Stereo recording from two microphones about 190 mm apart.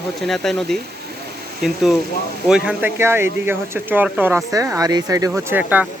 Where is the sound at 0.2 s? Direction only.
Centre (ahead or behind).